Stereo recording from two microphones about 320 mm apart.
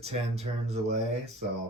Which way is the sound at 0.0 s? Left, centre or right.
Centre.